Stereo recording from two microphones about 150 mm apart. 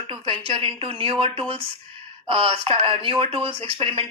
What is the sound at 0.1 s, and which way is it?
A woman's voice, 35° right (ahead or behind).